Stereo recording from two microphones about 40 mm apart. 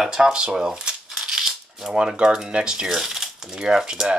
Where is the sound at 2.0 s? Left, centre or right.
Right.